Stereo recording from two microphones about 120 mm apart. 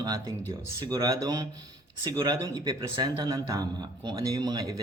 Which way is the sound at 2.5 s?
30° right (ahead or behind).